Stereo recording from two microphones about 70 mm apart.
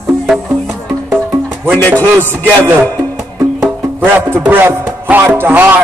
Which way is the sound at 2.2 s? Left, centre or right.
Right.